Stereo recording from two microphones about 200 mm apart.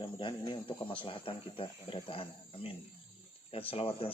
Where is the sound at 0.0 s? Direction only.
25° left (ahead or behind).